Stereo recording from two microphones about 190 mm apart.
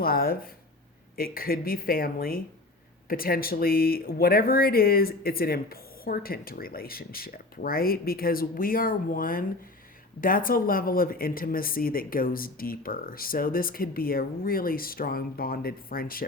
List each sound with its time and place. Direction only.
0.0 s speech: 50° left (ahead or behind)